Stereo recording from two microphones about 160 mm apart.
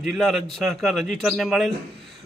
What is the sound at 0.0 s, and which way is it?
Speech, centre (ahead or behind).